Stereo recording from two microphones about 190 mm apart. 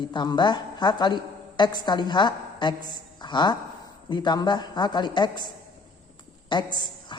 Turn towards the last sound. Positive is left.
turn(degrees=25)  # may be behind; listen again after turning